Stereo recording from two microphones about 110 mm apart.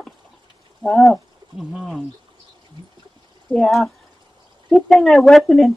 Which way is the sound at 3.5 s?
Centre (ahead or behind).